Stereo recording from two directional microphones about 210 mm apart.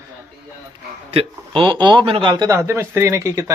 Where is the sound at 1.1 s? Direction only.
25° right (ahead or behind).